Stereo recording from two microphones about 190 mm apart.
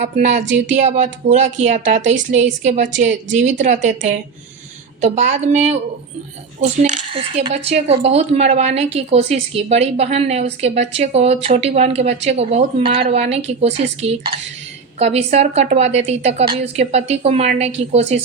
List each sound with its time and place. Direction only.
0.2 s speech: 40° right (ahead or behind)
0.4 s speech: 70° right (ahead or behind)
0.9 s speech: 40° right (ahead or behind)
4.9 s speech: 35° right (ahead or behind)
7.1 s speech: 30° right (ahead or behind)